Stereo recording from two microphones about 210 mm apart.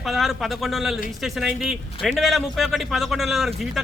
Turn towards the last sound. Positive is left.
turn(degrees=0)  # may be behind; listen again after turning